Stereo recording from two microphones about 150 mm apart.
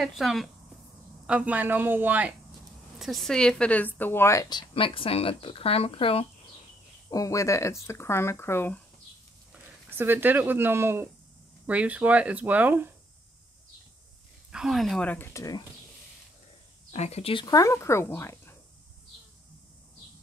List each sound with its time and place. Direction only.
0.0 s speech: centre (ahead or behind)
3.0 s speech: centre (ahead or behind); by 6.2 s 40° left (ahead or behind)
7.1 s speech: 20° left (ahead or behind)
9.5 s speech: 15° right (ahead or behind)
14.5 s speech: 5° right (ahead or behind); by 15.6 s 20° left (ahead or behind)
16.9 s speech: 45° left (ahead or behind); by 18.6 s 15° left (ahead or behind)